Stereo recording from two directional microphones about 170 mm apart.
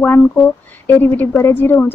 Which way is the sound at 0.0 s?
10° left (ahead or behind).